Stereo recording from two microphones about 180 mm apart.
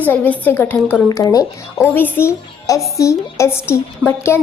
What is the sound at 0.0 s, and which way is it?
A woman's voice, 10° left (ahead or behind).